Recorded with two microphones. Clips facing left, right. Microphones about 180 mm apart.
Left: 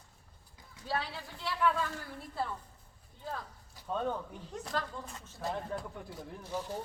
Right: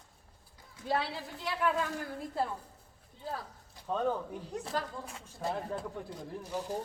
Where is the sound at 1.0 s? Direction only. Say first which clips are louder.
Right 3 dB; 45° right (ahead or behind).